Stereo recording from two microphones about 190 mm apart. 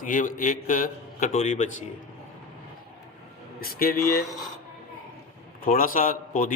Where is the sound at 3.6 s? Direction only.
50° left (ahead or behind).